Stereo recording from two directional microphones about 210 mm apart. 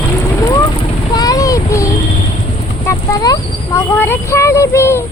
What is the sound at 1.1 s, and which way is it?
Child singing, 15° left (ahead or behind).